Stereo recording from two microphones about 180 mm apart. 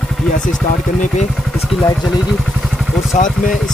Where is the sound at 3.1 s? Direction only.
45° left (ahead or behind).